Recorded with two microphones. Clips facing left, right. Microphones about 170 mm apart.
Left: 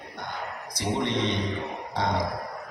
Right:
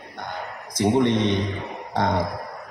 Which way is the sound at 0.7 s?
50° right (ahead or behind).